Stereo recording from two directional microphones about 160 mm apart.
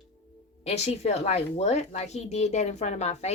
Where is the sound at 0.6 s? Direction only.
40° left (ahead or behind).